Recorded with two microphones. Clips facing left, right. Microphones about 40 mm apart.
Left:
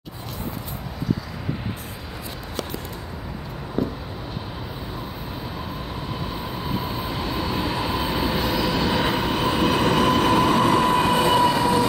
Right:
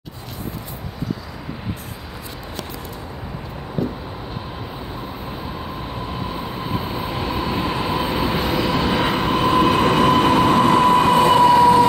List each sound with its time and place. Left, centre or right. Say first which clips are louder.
6.8 s train: right 2 dB; right